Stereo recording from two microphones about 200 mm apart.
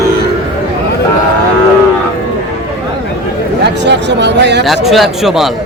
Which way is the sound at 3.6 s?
60° right (ahead or behind).